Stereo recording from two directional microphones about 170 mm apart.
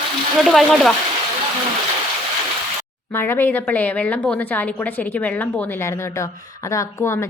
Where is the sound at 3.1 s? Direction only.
15° left (ahead or behind).